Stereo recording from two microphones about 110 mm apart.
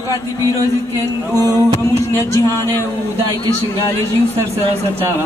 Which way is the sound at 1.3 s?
30° right (ahead or behind).